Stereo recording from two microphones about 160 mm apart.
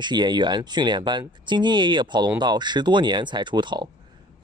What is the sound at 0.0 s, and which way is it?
Speech, 30° right (ahead or behind).